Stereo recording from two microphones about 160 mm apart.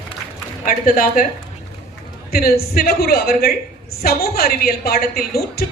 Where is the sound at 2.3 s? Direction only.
70° left (ahead or behind).